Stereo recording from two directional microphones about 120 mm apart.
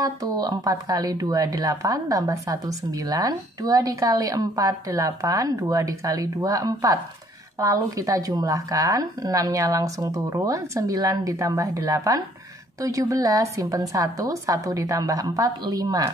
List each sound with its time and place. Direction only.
0.0 s speech: 30° right (ahead or behind)